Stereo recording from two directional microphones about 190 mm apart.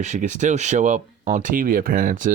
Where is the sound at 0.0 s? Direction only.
40° right (ahead or behind).